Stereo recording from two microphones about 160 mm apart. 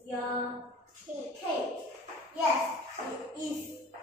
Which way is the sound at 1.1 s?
10° right (ahead or behind).